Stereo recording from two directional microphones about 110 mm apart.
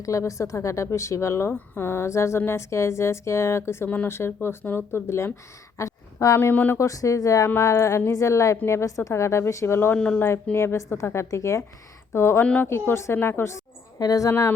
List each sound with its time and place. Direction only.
0.0 s a woman's voice: 30° left (ahead or behind)
6.8 s a woman's voice: 30° left (ahead or behind)